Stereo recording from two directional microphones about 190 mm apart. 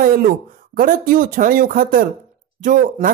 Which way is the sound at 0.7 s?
50° right (ahead or behind).